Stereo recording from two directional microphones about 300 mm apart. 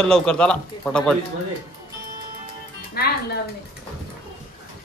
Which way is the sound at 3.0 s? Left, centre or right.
Left.